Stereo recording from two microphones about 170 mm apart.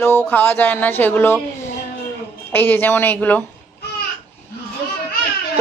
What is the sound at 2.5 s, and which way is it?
Speech, 10° left (ahead or behind).